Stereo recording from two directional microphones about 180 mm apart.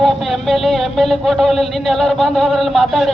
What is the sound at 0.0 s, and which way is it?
Speech, centre (ahead or behind).